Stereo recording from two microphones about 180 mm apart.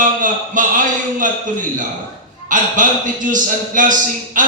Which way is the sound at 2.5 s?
45° right (ahead or behind).